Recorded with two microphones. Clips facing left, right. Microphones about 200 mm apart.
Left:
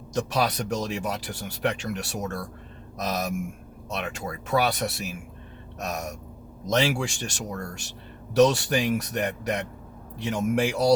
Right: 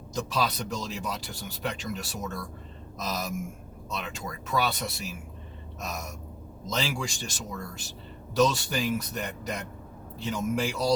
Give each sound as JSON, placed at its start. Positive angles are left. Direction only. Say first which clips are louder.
{"t": 0.1, "sound": "speech", "louder": "left 4 dB", "side_deg": 70}